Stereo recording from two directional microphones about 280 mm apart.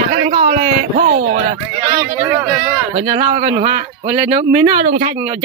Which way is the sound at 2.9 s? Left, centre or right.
Right.